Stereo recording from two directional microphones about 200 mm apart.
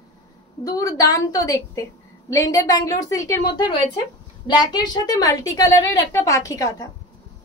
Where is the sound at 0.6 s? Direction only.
15° left (ahead or behind).